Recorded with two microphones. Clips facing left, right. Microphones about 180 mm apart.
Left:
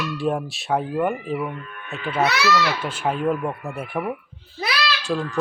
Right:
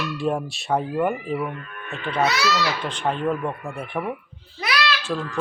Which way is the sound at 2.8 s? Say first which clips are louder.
Left 1 dB; 5° left (ahead or behind).